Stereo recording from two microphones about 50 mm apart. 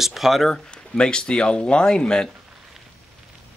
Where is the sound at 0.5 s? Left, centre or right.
Centre.